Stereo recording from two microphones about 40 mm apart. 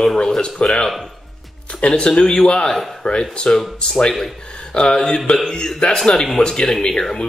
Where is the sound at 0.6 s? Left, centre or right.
Left.